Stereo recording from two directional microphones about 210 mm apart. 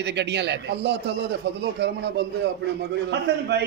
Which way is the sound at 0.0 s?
55° right (ahead or behind).